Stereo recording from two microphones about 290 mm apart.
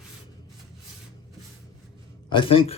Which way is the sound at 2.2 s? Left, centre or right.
Centre.